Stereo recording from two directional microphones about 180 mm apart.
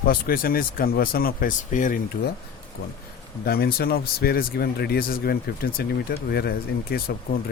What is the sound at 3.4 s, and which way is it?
Speech, 60° left (ahead or behind).